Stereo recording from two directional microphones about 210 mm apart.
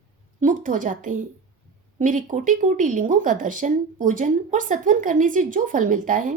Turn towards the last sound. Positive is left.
turn(degrees=-40)  # may be behind; listen again after turning